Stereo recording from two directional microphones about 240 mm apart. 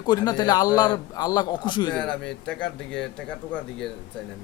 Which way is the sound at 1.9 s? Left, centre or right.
Centre.